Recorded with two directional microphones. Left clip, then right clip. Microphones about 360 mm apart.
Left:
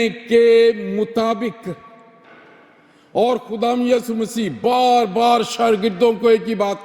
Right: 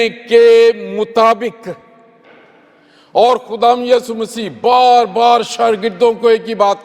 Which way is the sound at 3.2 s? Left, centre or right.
Right.